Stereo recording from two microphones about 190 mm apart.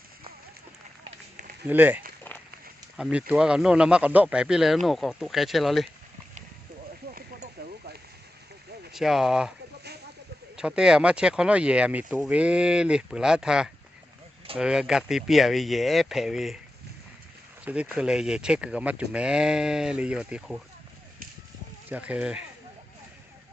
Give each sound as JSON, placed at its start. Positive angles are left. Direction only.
{"t": 1.6, "sound": "speech", "side_deg": -10}
{"t": 2.3, "sound": "a sound", "side_deg": 10}
{"t": 3.0, "sound": "speech", "side_deg": -5}
{"t": 7.1, "sound": "a sound", "side_deg": -45}
{"t": 8.9, "sound": "speech", "side_deg": 0}
{"t": 10.6, "sound": "speech", "side_deg": -5}
{"t": 17.7, "sound": "speech", "side_deg": -5}
{"t": 21.8, "sound": "speech", "side_deg": -10}